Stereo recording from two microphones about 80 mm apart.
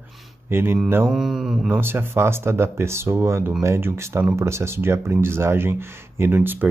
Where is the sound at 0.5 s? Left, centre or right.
Right.